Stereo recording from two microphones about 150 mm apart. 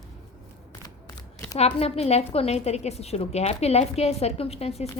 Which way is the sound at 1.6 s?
45° left (ahead or behind).